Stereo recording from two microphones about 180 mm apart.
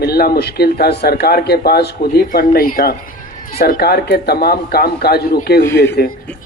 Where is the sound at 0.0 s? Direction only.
60° left (ahead or behind).